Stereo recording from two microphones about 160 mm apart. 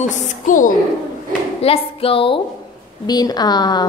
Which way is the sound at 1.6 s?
35° left (ahead or behind).